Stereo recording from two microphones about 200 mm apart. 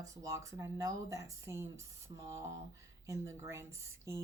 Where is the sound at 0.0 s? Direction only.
15° right (ahead or behind).